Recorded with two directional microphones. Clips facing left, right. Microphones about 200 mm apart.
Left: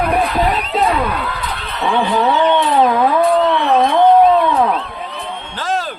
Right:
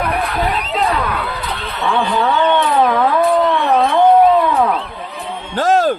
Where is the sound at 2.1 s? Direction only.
10° left (ahead or behind).